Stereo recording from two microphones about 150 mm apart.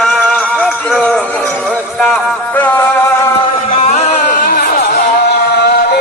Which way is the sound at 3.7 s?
45° left (ahead or behind).